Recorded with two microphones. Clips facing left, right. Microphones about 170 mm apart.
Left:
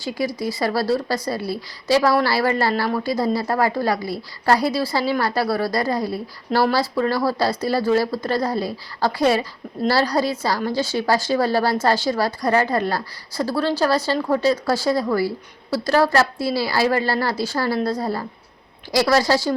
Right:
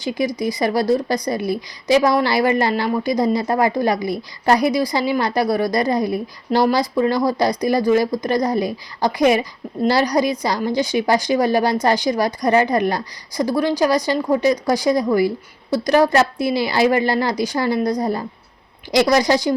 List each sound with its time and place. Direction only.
0.0 s a woman's voice: 20° right (ahead or behind)